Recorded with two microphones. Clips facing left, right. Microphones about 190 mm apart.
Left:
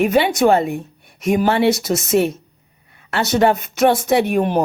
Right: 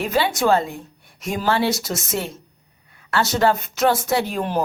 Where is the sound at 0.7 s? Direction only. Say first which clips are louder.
Left 9 dB; 60° left (ahead or behind).